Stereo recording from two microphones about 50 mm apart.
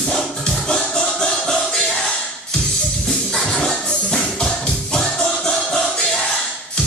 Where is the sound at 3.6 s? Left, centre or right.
Centre.